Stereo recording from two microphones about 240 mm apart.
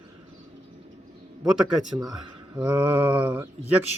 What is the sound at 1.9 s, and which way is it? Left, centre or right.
Speech, centre.